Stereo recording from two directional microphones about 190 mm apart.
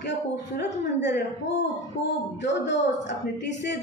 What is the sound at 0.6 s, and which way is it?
Speech, 65° left (ahead or behind).